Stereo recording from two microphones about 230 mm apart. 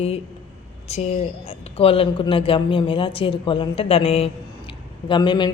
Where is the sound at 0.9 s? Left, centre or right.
Left.